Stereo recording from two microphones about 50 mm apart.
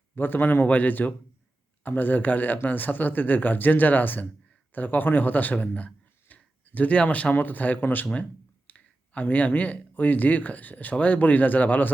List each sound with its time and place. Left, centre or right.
0.2 s a man's voice: left
8.1 s speech: left